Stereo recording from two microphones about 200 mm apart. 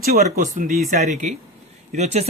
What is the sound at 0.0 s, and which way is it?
Speech, 50° right (ahead or behind).